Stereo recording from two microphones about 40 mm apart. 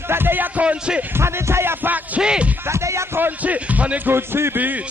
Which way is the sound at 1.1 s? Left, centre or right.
Right.